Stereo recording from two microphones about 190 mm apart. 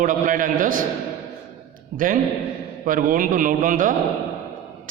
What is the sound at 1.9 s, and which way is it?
A man's voice, 45° right (ahead or behind).